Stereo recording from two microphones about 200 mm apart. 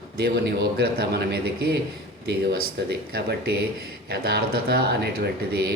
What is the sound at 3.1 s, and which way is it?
A man's voice, 50° right (ahead or behind).